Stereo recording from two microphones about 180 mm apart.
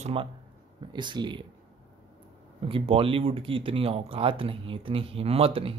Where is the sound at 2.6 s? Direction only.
30° right (ahead or behind).